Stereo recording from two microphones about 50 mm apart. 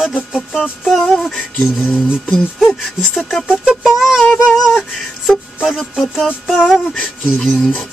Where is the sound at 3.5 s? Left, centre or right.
Centre.